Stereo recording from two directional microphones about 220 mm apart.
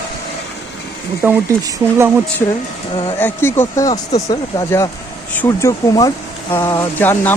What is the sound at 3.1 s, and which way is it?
Speech, 10° left (ahead or behind).